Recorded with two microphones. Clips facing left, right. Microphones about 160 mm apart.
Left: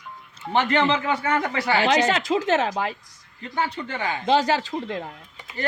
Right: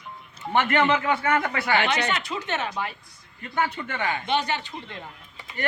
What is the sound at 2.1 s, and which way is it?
Speech, 90° left.